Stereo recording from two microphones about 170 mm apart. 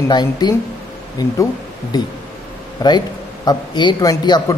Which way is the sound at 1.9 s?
25° left (ahead or behind).